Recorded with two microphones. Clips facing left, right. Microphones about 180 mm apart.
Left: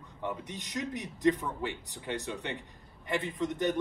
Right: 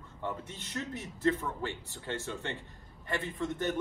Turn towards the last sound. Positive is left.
turn(degrees=15)  # may be behind; listen again after turning